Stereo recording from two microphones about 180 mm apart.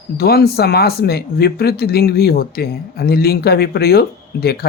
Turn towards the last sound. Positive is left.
turn(degrees=60)  # may be behind; listen again after turning